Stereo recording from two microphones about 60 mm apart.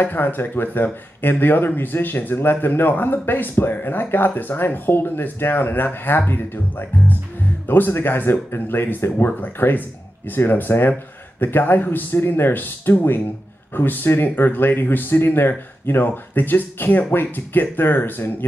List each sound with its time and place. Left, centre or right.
0.0 s speech: left